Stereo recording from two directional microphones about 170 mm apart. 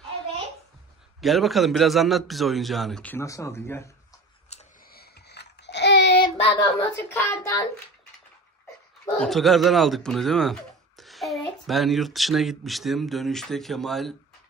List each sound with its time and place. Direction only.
1.2 s speech: centre (ahead or behind)
4.5 s a sound: 40° left (ahead or behind)
4.8 s babbling: 65° left (ahead or behind); by 6.2 s 90° left
6.2 s child singing: 25° left (ahead or behind)
7.2 s speech: 20° left (ahead or behind)
9.2 s speech: centre (ahead or behind)